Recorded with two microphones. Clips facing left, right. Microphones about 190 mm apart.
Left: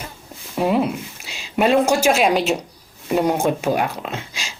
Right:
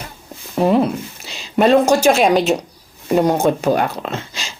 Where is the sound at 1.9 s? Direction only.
5° left (ahead or behind).